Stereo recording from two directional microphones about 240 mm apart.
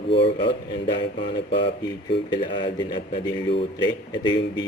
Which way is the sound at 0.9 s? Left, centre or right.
Left.